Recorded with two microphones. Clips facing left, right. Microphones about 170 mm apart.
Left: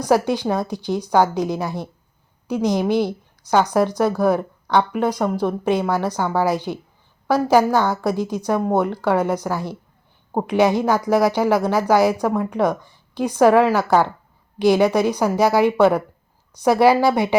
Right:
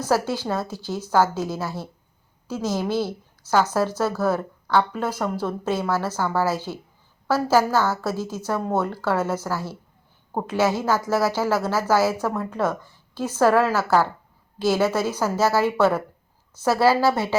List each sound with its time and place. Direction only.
0.0 s a woman's voice: 15° left (ahead or behind)